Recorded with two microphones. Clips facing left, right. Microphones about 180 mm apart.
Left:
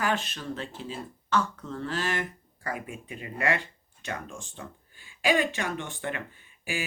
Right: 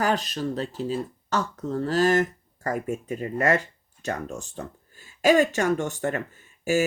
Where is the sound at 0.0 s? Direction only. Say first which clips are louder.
Right 5 dB; 40° right (ahead or behind).